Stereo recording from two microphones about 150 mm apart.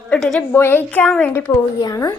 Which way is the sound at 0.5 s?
15° left (ahead or behind).